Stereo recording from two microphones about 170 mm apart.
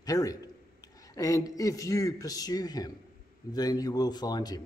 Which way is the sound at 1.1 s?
20° left (ahead or behind).